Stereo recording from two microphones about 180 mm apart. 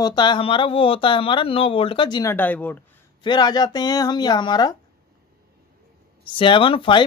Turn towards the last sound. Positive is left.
turn(degrees=30)  # may be behind; listen again after turning